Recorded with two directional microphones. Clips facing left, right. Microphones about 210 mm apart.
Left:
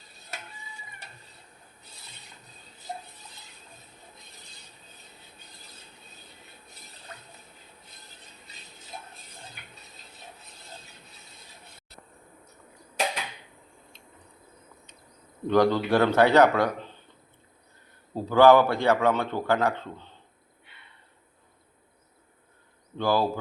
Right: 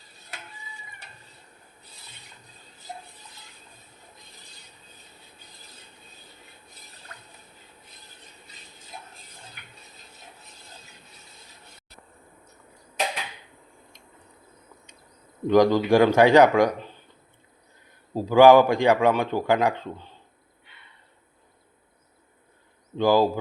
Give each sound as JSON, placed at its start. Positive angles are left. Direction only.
{"t": 15.4, "sound": "a man's voice", "side_deg": -10}
{"t": 18.1, "sound": "a man's voice", "side_deg": -10}
{"t": 23.0, "sound": "a man's voice", "side_deg": -15}